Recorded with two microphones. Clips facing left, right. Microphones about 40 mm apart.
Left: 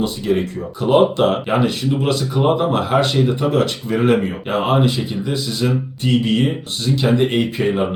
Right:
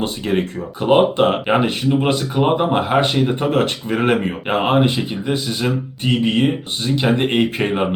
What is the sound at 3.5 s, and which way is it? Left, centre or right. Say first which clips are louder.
A man's voice: even; right.